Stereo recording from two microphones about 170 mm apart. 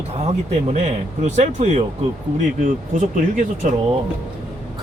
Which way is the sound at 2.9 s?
50° right (ahead or behind).